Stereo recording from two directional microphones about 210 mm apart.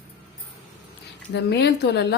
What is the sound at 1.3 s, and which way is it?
Speech, 50° left (ahead or behind).